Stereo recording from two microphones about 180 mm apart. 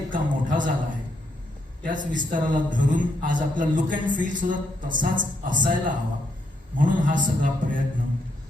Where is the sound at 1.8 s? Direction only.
45° right (ahead or behind).